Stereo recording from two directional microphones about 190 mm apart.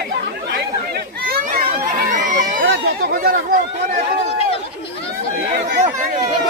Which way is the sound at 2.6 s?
60° right (ahead or behind).